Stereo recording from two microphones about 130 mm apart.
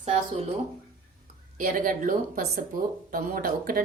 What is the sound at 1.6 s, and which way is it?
Speech, 90° right.